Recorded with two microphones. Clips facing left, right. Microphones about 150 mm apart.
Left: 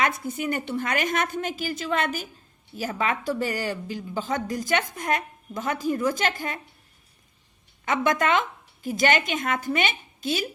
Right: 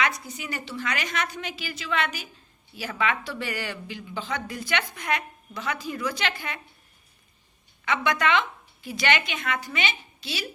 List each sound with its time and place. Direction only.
0.0 s a woman's voice: 50° left (ahead or behind)
7.9 s a woman's voice: 45° left (ahead or behind)